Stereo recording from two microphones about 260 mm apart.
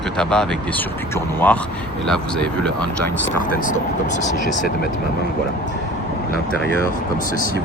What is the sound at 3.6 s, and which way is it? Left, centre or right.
Speech, left.